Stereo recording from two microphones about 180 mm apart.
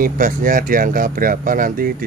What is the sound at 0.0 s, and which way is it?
Speech, 50° right (ahead or behind).